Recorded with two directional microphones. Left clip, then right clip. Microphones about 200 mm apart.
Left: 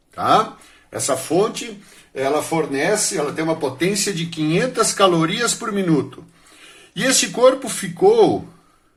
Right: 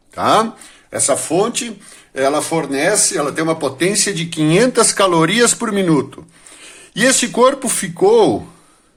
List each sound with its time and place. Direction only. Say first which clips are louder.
0.2 s speech: right 2 dB; 35° right (ahead or behind)
2.1 s speech: right 3 dB; 40° right (ahead or behind)